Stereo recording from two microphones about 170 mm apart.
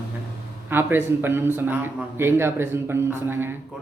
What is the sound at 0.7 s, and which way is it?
A man's voice, 10° right (ahead or behind).